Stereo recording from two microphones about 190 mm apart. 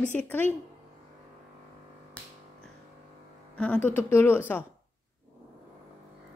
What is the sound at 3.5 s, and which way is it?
Speech, 5° left (ahead or behind).